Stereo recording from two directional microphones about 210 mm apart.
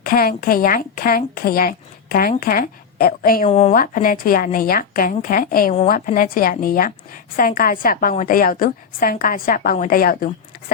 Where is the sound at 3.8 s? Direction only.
40° left (ahead or behind).